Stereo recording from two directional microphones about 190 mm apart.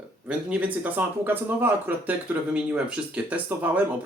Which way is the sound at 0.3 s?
5° right (ahead or behind).